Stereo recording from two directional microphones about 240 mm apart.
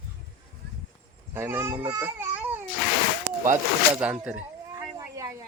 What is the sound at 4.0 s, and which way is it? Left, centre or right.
Speech, centre.